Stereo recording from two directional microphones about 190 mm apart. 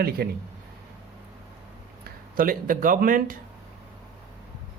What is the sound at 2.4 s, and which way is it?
Speech, 45° right (ahead or behind).